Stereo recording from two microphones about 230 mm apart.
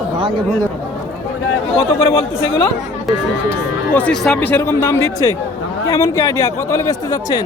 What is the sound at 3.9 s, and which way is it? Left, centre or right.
Speech, centre.